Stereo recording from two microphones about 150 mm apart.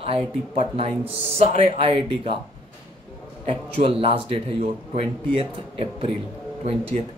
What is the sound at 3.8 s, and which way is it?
Speech, 40° right (ahead or behind).